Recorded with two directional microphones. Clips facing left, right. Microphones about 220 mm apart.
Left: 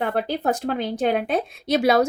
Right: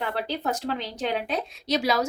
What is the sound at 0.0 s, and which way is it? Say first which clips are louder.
A woman's voice: left 6 dB; 50° left (ahead or behind).